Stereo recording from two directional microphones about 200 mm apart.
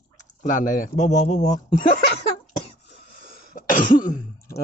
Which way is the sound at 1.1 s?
35° left (ahead or behind).